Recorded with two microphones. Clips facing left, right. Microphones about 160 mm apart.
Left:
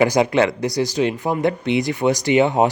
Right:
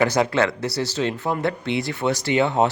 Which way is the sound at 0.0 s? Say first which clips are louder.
Left 3 dB; 15° left (ahead or behind).